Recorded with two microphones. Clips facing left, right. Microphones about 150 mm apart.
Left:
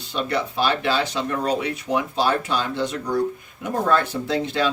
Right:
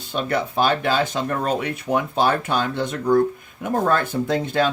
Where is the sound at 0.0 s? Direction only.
50° right (ahead or behind).